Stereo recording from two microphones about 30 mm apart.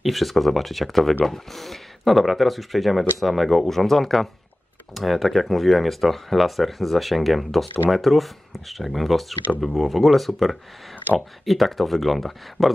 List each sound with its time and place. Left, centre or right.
0.0 s speech: centre